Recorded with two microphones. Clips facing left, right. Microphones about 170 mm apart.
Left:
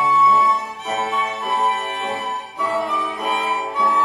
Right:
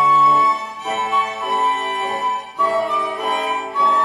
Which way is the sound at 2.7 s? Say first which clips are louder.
Right 3 dB; centre (ahead or behind).